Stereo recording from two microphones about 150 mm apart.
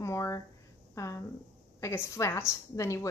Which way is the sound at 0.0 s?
20° left (ahead or behind).